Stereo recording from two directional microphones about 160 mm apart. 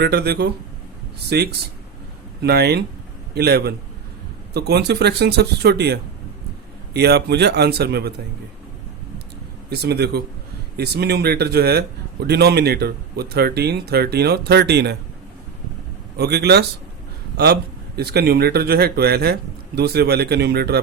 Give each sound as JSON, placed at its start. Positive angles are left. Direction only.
{"t": 0.0, "sound": "a man's voice", "side_deg": -85}
{"t": 9.6, "sound": "a man's voice", "side_deg": -90}
{"t": 16.1, "sound": "a man's voice", "side_deg": -90}